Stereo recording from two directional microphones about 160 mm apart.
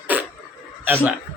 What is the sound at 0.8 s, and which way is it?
Speech, 10° right (ahead or behind).